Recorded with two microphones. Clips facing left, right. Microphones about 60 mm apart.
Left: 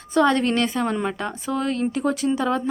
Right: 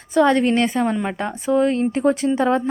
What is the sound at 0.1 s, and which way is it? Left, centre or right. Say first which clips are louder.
A woman's voice: right 3 dB; centre.